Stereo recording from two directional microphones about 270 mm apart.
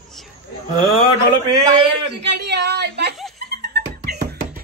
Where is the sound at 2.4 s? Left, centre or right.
Right.